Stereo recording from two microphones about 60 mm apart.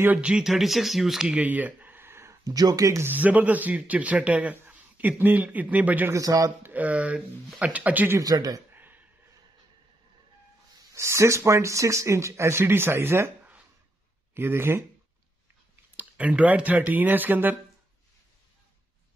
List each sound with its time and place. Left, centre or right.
0.4 s speech: centre
1.3 s a sound: right
2.4 s speech: right
3.0 s a man's voice: right
6.1 s speech: right
6.6 s a man's voice: right
8.2 s a man's voice: right
8.7 s a sound: right
11.0 s speech: right
14.3 s speech: right
16.0 s a man's voice: right